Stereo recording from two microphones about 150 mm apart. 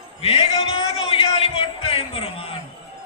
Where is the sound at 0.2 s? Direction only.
40° left (ahead or behind).